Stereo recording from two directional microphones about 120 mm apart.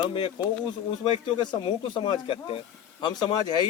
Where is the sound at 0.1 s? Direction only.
45° left (ahead or behind).